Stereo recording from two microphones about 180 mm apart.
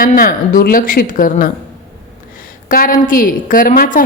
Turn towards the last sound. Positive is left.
turn(degrees=50)  # may be behind; listen again after turning